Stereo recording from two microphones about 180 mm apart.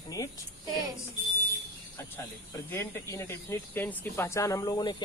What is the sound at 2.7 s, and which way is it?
Speech, 15° left (ahead or behind).